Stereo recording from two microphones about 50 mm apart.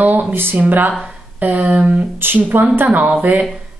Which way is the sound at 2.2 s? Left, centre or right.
Right.